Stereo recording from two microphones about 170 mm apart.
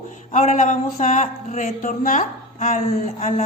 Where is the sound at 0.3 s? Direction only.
45° left (ahead or behind).